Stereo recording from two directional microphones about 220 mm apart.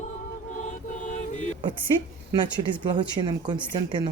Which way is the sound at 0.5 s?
35° left (ahead or behind).